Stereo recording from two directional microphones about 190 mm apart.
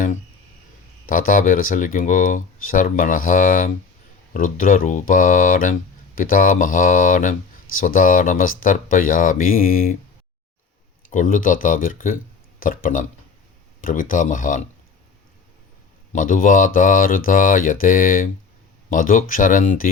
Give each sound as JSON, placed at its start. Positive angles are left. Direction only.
{"t": 1.1, "sound": "speech", "side_deg": 45}
{"t": 11.1, "sound": "speech", "side_deg": 45}
{"t": 16.1, "sound": "speech", "side_deg": 45}